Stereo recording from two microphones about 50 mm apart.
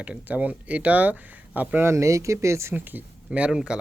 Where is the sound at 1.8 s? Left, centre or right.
Right.